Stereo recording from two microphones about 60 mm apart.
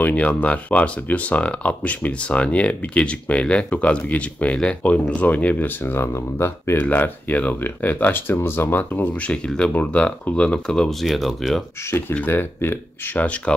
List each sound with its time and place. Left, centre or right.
0.0 s speech: left
6.8 s speech: left; by 11.6 s centre
11.9 s speech: left